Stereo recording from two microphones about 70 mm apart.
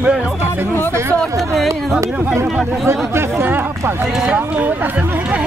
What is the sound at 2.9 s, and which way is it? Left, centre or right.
Speech, right.